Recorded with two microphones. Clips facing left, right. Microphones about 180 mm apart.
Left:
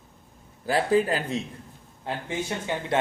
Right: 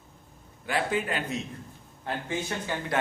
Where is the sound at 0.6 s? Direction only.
35° left (ahead or behind).